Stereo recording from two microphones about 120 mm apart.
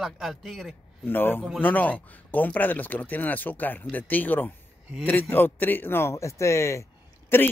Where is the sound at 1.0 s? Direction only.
15° left (ahead or behind).